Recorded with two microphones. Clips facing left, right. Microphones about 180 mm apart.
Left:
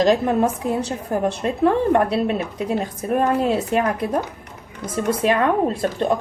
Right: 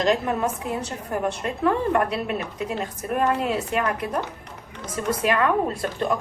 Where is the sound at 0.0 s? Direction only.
35° left (ahead or behind).